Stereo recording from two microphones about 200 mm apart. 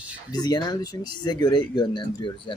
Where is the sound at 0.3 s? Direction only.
20° left (ahead or behind).